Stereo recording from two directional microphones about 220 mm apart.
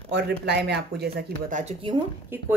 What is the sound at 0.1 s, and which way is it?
Speech, 50° right (ahead or behind).